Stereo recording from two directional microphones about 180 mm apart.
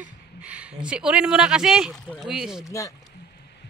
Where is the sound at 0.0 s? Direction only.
5° right (ahead or behind).